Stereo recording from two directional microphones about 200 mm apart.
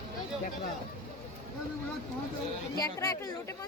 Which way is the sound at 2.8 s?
15° left (ahead or behind).